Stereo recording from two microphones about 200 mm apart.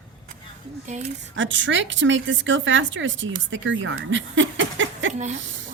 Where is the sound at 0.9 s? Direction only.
35° right (ahead or behind).